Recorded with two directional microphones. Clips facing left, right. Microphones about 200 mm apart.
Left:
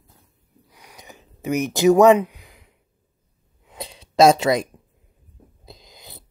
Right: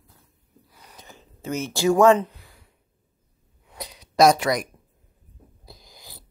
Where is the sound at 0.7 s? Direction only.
15° left (ahead or behind).